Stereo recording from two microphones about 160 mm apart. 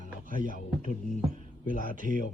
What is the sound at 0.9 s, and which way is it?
Speech, 55° left (ahead or behind).